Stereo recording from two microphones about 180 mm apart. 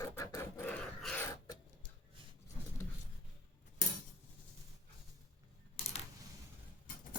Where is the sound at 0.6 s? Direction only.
5° left (ahead or behind).